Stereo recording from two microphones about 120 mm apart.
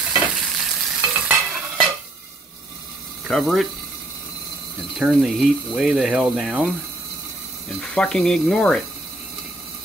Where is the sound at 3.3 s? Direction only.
Centre (ahead or behind).